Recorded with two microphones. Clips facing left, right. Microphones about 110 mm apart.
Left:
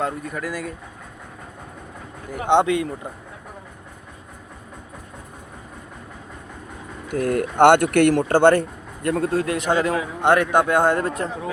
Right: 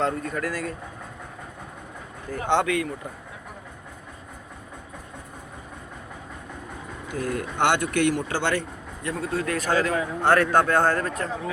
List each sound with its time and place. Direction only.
0.0 s a man's voice: 10° left (ahead or behind)
2.3 s speech: 20° left (ahead or behind)
7.1 s speech: 60° left (ahead or behind)
9.4 s a man's voice: 25° left (ahead or behind)